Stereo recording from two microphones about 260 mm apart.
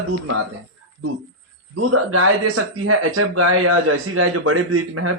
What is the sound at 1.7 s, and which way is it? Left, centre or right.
Speech, right.